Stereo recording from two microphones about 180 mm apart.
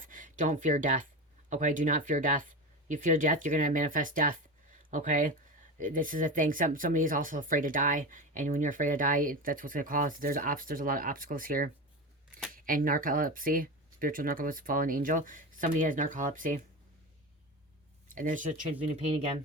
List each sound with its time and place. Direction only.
0.0 s speech: 45° right (ahead or behind)
18.1 s speech: 45° right (ahead or behind)